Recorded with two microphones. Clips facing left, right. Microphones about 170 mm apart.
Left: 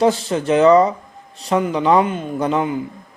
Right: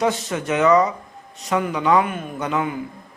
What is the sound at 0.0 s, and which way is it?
A man's voice, 30° left (ahead or behind).